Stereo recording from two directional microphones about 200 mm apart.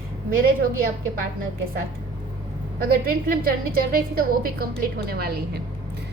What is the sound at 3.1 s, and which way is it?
A woman's voice, 45° right (ahead or behind).